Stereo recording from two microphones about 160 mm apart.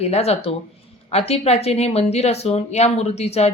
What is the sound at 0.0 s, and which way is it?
A woman's voice, 40° left (ahead or behind).